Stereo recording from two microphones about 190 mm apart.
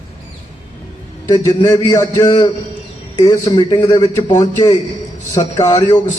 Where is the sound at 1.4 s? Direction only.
20° left (ahead or behind).